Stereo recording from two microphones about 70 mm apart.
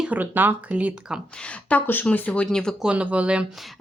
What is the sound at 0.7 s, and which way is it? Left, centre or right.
Speech, centre.